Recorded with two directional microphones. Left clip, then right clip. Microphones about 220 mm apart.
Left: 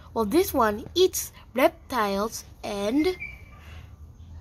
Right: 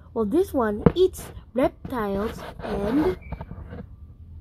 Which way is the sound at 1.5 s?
25° left (ahead or behind).